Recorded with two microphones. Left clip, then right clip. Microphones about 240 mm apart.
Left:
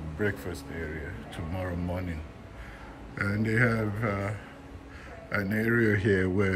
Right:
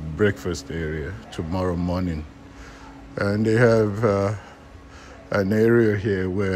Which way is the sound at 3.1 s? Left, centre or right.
Centre.